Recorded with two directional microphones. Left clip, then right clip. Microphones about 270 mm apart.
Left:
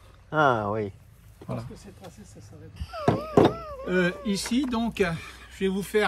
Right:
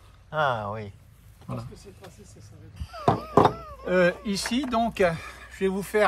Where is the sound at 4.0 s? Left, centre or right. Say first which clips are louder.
Right 4 dB; centre.